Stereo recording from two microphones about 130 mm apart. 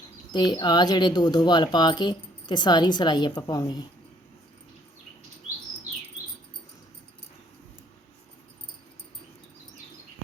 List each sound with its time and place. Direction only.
0.3 s speech: 35° left (ahead or behind)